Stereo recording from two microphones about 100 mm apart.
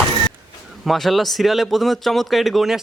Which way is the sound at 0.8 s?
Centre (ahead or behind).